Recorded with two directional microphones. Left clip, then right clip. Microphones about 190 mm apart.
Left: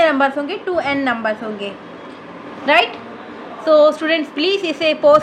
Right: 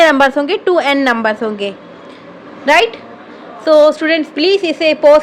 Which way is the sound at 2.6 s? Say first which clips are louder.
Right 4 dB; 45° right (ahead or behind).